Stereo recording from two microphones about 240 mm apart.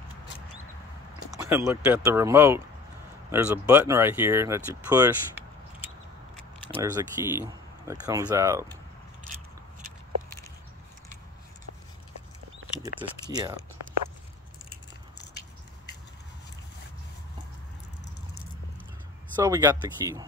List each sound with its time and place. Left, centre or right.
1.4 s speech: centre
6.7 s speech: centre
12.8 s speech: centre
19.4 s speech: centre